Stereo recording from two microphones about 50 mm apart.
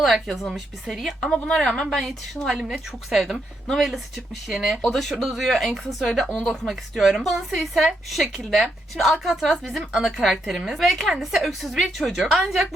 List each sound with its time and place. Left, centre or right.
0.0 s a woman's voice: centre
1.7 s a woman's voice: centre
2.5 s a woman's voice: centre
6.2 s a woman's voice: centre
6.7 s a woman's voice: centre
9.9 s a woman's voice: centre